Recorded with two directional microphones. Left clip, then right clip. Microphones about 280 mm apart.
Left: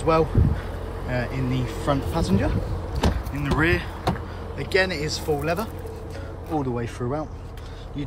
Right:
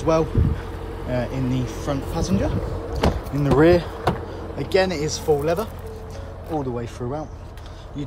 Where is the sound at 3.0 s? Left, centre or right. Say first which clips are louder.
Right 4 dB; right.